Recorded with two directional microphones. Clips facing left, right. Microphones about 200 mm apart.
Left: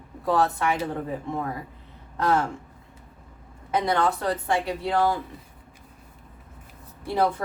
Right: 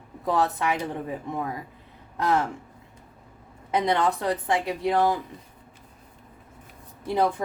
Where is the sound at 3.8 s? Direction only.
15° right (ahead or behind).